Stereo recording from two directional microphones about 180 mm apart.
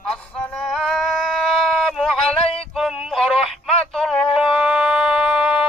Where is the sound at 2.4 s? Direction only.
35° left (ahead or behind).